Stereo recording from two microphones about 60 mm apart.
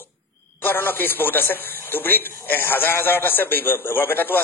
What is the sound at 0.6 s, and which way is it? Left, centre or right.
A man's voice, left.